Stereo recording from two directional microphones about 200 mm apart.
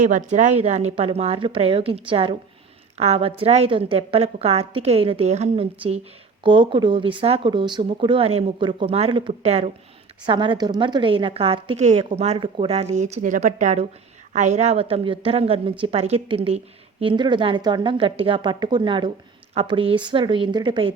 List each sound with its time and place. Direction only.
0.0 s a woman's voice: 40° right (ahead or behind); by 20.9 s 25° right (ahead or behind)